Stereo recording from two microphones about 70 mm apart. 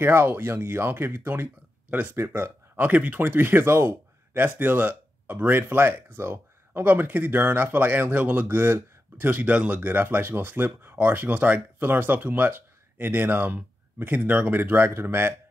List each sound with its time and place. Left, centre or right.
0.0 s speech: right